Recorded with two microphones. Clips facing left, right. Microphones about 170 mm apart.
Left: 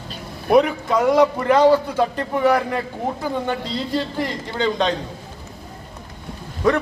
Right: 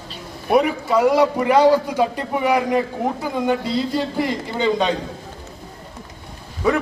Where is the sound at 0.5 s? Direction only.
5° right (ahead or behind).